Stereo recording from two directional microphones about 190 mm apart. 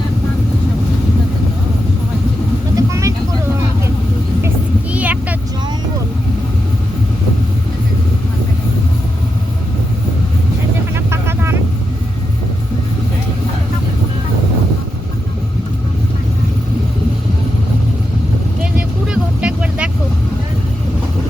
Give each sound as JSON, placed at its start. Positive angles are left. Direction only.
{"t": 2.7, "sound": "vehicle", "side_deg": -15}
{"t": 4.4, "sound": "vehicle", "side_deg": -10}
{"t": 10.9, "sound": "vehicle", "side_deg": -15}
{"t": 19.1, "sound": "vehicle", "side_deg": -5}